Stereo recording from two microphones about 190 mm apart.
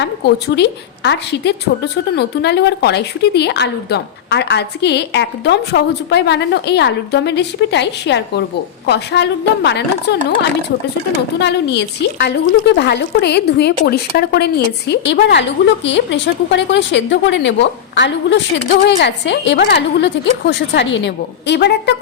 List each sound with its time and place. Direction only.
0.0 s a woman's voice: 60° left (ahead or behind)
11.3 s a woman's voice: 65° left (ahead or behind)